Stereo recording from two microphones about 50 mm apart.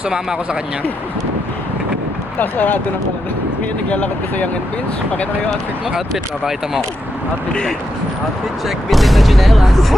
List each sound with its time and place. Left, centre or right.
2.4 s speech: left
3.8 s speech: left
8.6 s speech: centre